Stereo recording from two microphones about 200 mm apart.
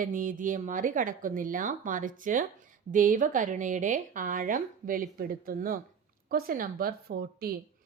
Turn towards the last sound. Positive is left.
turn(degrees=-50)  # may be behind; listen again after turning